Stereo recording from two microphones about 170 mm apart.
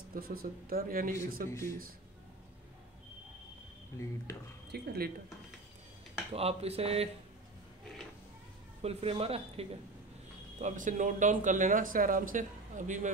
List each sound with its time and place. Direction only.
0.1 s speech: 60° right (ahead or behind)
1.5 s speech: 15° left (ahead or behind)
4.7 s speech: 65° right (ahead or behind)
6.3 s speech: 35° right (ahead or behind)
8.8 s speech: 35° right (ahead or behind)
10.6 s speech: 45° right (ahead or behind)